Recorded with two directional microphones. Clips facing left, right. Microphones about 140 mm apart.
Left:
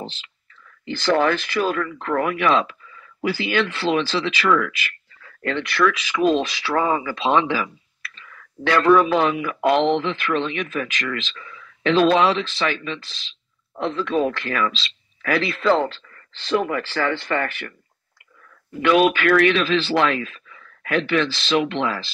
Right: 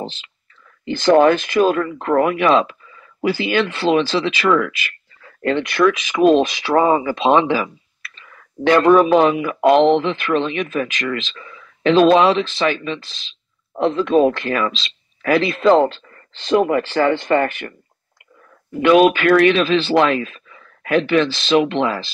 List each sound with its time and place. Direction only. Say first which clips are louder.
0.0 s speech: right 5 dB; 20° right (ahead or behind)
11.3 s speech: right 2 dB; 30° right (ahead or behind)
18.7 s speech: right 5 dB; 20° right (ahead or behind)